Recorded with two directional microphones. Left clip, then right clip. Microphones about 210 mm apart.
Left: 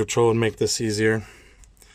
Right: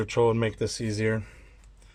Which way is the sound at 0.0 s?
55° left (ahead or behind).